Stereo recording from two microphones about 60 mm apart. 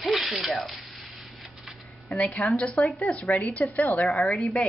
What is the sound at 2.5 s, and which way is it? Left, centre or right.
Speech, left.